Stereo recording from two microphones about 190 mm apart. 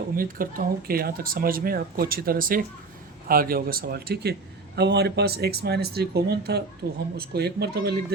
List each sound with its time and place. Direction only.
0.2 s speech: 50° right (ahead or behind)